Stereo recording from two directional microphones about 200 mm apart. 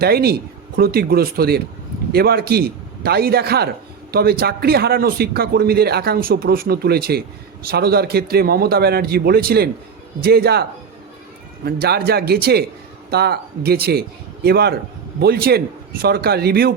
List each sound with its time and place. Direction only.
0.0 s speech: 50° right (ahead or behind)